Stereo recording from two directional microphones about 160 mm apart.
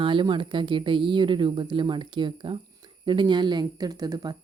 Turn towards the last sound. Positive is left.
turn(degrees=-25)  # may be behind; listen again after turning